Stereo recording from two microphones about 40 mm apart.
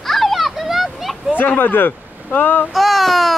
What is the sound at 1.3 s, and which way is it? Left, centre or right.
Speech, left.